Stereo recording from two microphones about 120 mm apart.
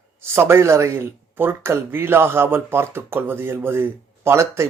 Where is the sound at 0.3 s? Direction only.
20° right (ahead or behind).